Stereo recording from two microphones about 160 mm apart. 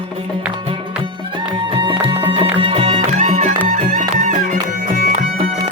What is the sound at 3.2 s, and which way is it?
Music, 50° right (ahead or behind).